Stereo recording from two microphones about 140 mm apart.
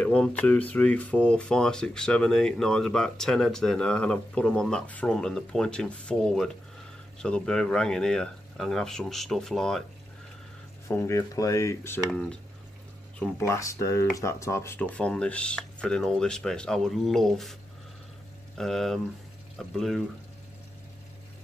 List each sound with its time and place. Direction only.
0.0 s speech: 5° left (ahead or behind)
10.9 s speech: 20° left (ahead or behind)
12.1 s speech: 5° left (ahead or behind)
13.4 s speech: 20° left (ahead or behind); by 17.6 s centre (ahead or behind)
18.6 s speech: centre (ahead or behind)